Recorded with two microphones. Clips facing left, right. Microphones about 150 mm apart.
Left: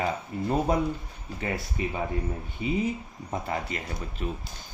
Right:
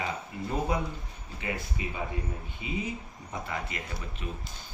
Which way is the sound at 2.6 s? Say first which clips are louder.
Left 7 dB; 40° left (ahead or behind).